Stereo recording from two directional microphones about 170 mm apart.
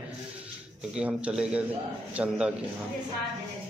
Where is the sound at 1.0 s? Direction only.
5° right (ahead or behind).